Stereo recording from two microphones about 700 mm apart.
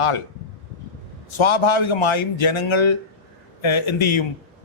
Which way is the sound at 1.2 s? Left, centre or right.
Left.